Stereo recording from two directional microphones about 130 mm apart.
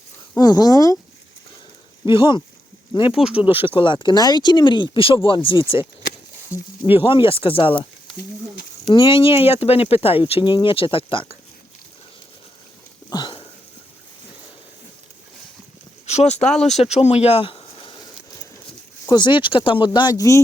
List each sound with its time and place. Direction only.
0.3 s speech: 30° left (ahead or behind)
2.1 s speech: 35° left (ahead or behind)
3.1 s speech: 5° right (ahead or behind)
3.3 s speech: 45° left (ahead or behind)
6.9 s speech: 45° left (ahead or behind)
8.9 s speech: 40° left (ahead or behind)
13.1 s a sound: 35° left (ahead or behind)
16.0 s speech: 60° left (ahead or behind)
16.4 s speech: 5° left (ahead or behind)
16.7 s speech: 55° left (ahead or behind); by 18.0 s 40° left (ahead or behind)
19.1 s speech: 35° left (ahead or behind)